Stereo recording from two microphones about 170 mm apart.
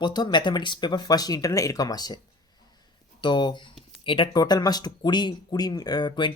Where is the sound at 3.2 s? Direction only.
25° left (ahead or behind).